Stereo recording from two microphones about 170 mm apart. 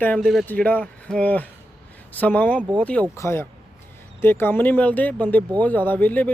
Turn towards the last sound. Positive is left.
turn(degrees=10)  # may be behind; listen again after turning